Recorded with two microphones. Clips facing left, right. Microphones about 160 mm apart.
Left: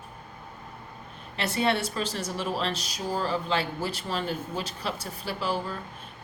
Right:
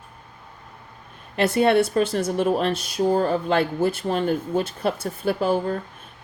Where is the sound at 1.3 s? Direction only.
50° right (ahead or behind).